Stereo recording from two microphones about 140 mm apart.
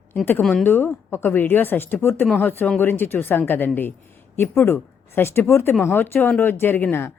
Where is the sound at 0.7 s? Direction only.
15° left (ahead or behind).